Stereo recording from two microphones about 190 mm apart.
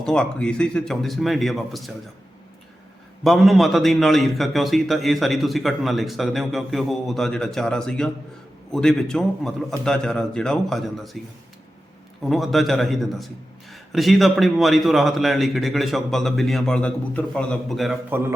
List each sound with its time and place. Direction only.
0.0 s a man's voice: 5° left (ahead or behind)
3.2 s a man's voice: centre (ahead or behind)
12.2 s a man's voice: centre (ahead or behind)